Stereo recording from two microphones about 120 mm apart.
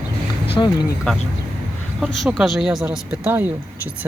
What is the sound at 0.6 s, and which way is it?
Speech, 30° left (ahead or behind).